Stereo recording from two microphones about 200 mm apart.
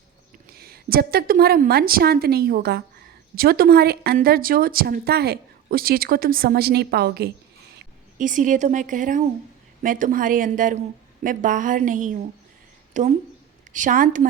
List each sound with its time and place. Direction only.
0.5 s a woman's voice: 50° right (ahead or behind)
7.8 s a woman's voice: 40° right (ahead or behind)